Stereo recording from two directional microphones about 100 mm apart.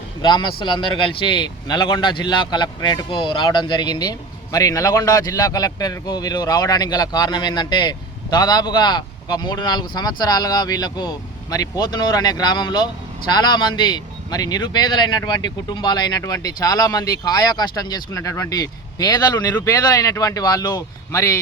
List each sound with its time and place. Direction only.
0.2 s speech: 50° left (ahead or behind); by 21.3 s 30° left (ahead or behind)